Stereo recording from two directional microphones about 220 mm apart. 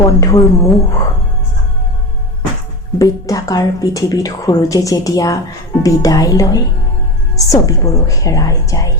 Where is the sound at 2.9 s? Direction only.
15° left (ahead or behind).